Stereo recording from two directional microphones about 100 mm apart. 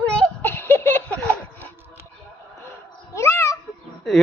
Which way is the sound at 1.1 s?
10° left (ahead or behind).